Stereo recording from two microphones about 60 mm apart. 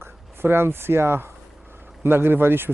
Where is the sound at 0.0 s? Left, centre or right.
Right.